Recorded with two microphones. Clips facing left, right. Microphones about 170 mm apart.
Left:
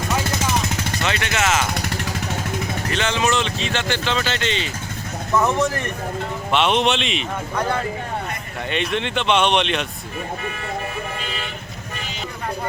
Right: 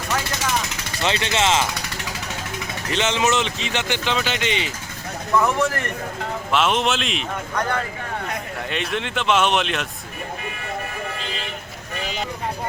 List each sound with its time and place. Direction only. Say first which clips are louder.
1.0 s speech: right 2 dB; 25° right (ahead or behind)
2.9 s speech: right 1 dB; 20° right (ahead or behind)
5.4 s speech: left 1 dB; 20° left (ahead or behind)
6.5 s speech: left 2 dB; centre (ahead or behind)
8.7 s speech: left 3 dB; centre (ahead or behind)